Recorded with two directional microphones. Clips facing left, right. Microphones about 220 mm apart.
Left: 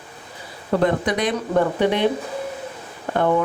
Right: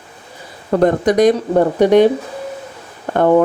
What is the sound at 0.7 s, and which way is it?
Speech, 45° right (ahead or behind).